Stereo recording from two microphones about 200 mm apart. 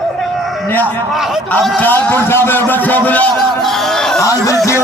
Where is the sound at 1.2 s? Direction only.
Centre (ahead or behind).